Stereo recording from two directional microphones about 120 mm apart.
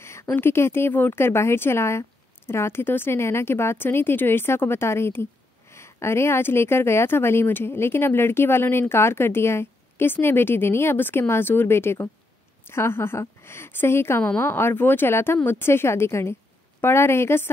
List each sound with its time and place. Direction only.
0.0 s speech: 20° left (ahead or behind)